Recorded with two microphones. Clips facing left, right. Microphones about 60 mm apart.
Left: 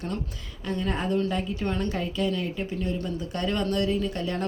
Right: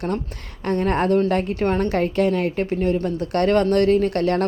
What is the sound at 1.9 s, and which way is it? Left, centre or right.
A woman's voice, right.